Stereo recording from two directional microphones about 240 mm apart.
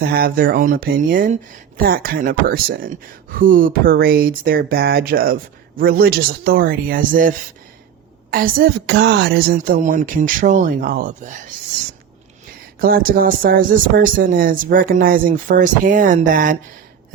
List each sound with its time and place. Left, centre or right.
0.0 s speech: right
12.8 s speech: right